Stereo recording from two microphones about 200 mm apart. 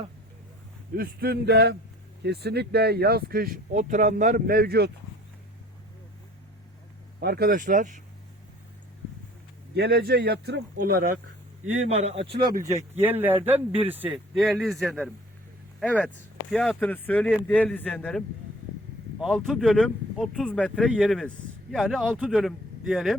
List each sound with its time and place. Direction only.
0.9 s speech: 50° right (ahead or behind)
7.2 s speech: 50° right (ahead or behind)
9.7 s speech: 50° right (ahead or behind)
11.9 s speech: 30° right (ahead or behind)
12.6 s speech: 15° right (ahead or behind); by 18.2 s 5° left (ahead or behind)
19.2 s speech: centre (ahead or behind)